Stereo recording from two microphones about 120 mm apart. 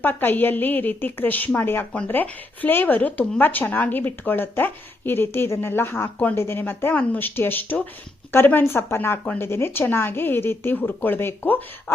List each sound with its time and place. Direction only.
0.0 s speech: 15° left (ahead or behind)